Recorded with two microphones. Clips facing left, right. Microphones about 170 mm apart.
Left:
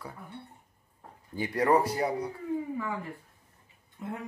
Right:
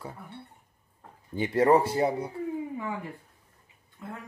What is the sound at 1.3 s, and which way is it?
Speech, 25° right (ahead or behind).